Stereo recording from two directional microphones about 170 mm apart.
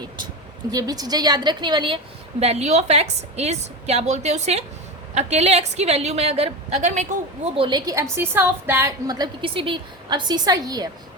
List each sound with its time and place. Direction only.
0.7 s a woman's voice: 20° right (ahead or behind)
2.4 s a woman's voice: 40° right (ahead or behind); by 10.8 s 20° right (ahead or behind)